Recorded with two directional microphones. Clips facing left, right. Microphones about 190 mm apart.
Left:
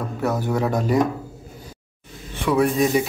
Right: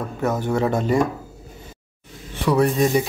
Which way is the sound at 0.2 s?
Centre (ahead or behind).